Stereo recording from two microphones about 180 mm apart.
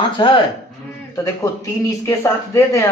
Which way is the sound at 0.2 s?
25° left (ahead or behind).